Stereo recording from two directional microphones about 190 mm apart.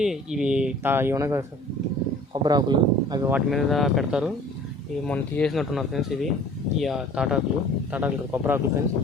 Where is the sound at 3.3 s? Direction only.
Centre (ahead or behind).